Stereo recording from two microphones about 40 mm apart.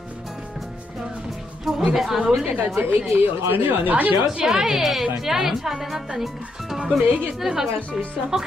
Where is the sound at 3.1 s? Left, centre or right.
Right.